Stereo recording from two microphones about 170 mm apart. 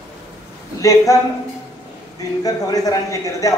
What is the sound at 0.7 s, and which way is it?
Speech, 20° left (ahead or behind).